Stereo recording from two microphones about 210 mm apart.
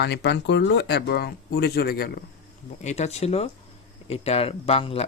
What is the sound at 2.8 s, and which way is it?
Speech, 30° left (ahead or behind).